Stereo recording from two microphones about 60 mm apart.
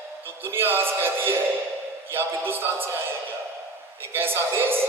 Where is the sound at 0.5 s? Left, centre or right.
Right.